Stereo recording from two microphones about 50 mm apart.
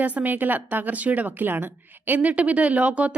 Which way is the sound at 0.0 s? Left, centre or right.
Right.